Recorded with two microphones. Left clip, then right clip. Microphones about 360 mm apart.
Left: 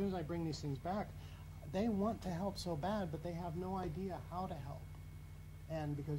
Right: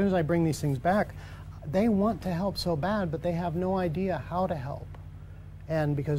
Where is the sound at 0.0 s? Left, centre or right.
Right.